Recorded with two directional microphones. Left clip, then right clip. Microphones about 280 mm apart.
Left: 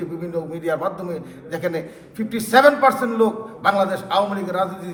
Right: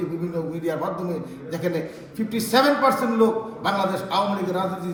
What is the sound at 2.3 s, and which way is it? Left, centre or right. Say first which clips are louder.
A man's voice: left 5 dB; left.